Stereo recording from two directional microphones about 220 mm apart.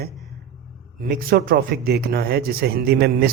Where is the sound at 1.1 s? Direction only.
40° right (ahead or behind).